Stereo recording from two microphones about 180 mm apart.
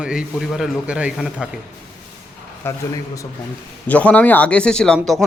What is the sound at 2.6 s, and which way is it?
Speech, 10° left (ahead or behind).